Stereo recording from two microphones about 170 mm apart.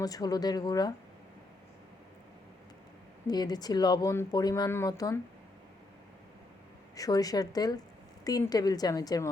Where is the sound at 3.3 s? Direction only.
25° left (ahead or behind).